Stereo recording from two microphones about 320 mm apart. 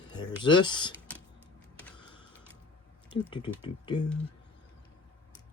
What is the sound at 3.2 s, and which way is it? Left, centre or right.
Speech, centre.